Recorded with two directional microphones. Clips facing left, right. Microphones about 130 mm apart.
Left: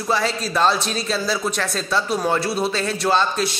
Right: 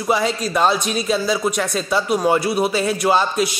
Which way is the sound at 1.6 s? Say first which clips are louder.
Right 3 dB; 5° right (ahead or behind).